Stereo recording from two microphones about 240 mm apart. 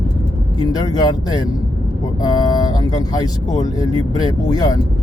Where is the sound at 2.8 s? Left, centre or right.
Centre.